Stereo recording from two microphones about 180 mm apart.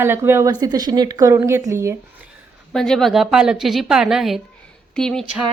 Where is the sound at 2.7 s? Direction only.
5° left (ahead or behind).